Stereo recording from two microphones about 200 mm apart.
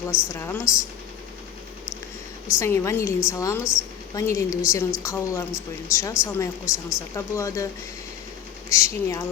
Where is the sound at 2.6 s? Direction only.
15° left (ahead or behind).